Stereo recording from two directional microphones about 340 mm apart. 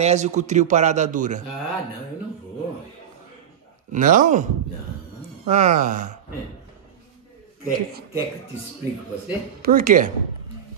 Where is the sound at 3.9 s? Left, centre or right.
Right.